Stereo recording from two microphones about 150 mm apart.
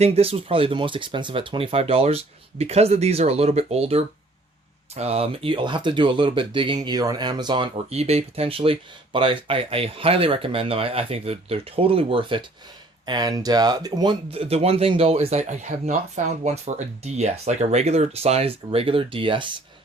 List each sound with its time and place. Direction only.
0.0 s speech: 40° right (ahead or behind)